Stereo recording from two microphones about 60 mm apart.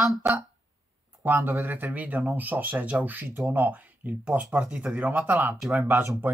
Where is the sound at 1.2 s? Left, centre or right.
Right.